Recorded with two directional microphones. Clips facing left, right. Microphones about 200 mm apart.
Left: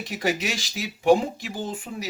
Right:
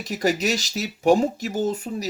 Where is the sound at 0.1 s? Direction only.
40° right (ahead or behind).